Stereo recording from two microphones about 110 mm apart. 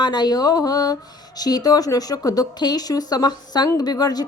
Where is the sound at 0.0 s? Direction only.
40° left (ahead or behind).